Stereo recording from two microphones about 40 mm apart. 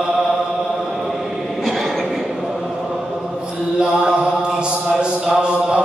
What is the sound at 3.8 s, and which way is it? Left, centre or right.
Mantra, centre.